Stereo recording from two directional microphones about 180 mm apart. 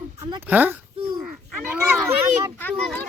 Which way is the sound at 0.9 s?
30° right (ahead or behind).